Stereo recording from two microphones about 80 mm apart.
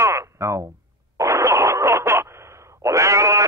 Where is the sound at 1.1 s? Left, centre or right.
Right.